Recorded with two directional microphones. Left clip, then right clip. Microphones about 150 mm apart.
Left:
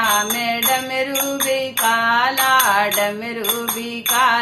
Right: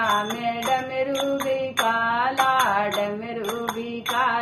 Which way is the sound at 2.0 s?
25° left (ahead or behind).